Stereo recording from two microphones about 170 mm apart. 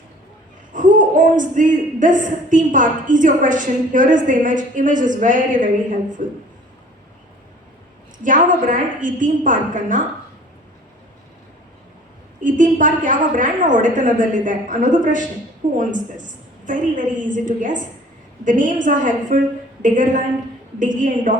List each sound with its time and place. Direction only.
0.7 s speech: 50° right (ahead or behind)
8.2 s speech: 50° right (ahead or behind)
12.4 s speech: 50° right (ahead or behind)
16.6 s speech: 50° right (ahead or behind)